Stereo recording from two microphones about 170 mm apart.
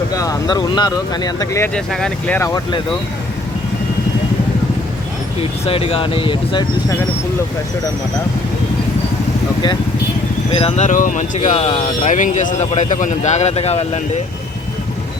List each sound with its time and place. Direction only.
0.1 s speech: 20° left (ahead or behind)
1.7 s speech: 5° left (ahead or behind)
5.4 s speech: 35° left (ahead or behind)
10.5 s speech: 35° left (ahead or behind)